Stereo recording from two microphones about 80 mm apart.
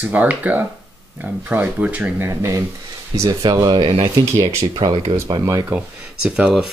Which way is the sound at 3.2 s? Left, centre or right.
Right.